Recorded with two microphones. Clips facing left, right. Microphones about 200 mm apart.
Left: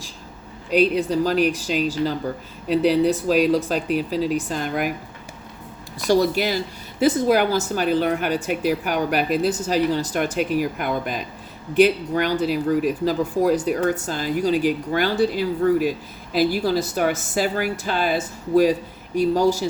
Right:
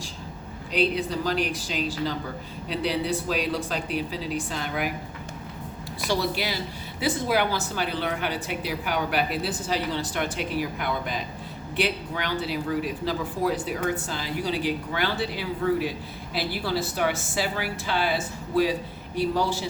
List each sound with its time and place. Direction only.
0.7 s speech: 45° left (ahead or behind)
6.1 s speech: 45° left (ahead or behind)